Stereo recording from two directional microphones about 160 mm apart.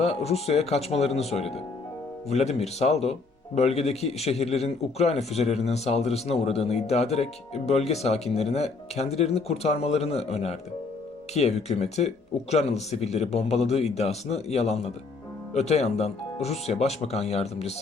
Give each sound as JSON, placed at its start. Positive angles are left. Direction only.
{"t": 0.0, "sound": "speech", "side_deg": 40}